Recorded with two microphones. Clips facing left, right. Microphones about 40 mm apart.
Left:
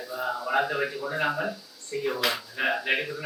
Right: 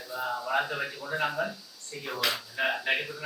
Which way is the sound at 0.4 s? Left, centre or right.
Centre.